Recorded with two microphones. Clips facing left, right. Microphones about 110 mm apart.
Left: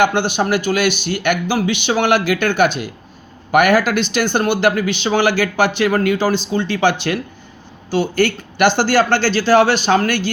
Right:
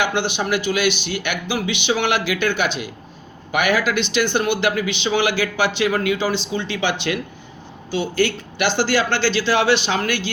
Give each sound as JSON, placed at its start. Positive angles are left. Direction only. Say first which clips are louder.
{"t": 0.0, "sound": "speech", "louder": "left 5 dB", "side_deg": 45}